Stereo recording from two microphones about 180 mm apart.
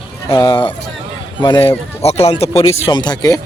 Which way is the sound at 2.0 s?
35° left (ahead or behind).